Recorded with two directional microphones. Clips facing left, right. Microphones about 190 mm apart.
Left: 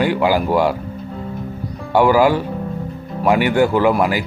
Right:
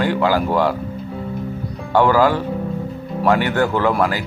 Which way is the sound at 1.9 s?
10° left (ahead or behind).